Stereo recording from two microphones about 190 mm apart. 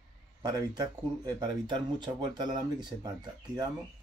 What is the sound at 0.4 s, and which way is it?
Speech, 20° right (ahead or behind).